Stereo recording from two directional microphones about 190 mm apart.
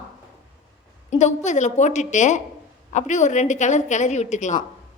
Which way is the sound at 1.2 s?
40° left (ahead or behind).